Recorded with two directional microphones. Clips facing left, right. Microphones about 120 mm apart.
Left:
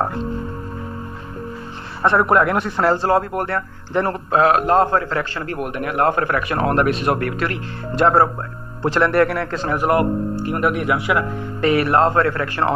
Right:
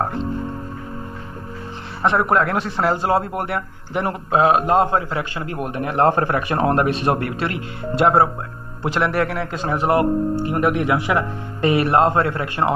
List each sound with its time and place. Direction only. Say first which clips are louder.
2.0 s speech: left 2 dB; centre (ahead or behind)
3.1 s a man's voice: left 2 dB; 20° right (ahead or behind)
5.6 s speech: right 2 dB; 25° right (ahead or behind)
8.8 s speech: left 4 dB; 5° right (ahead or behind)
9.8 s speech: right 1 dB; 25° right (ahead or behind)